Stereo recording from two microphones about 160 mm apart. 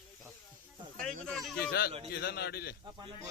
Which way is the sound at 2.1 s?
85° left.